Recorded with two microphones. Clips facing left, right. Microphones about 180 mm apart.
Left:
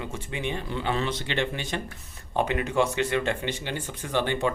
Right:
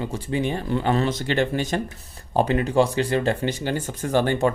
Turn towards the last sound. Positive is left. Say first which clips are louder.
# right 6 dB
turn(degrees=-40)  # may be behind; listen again after turning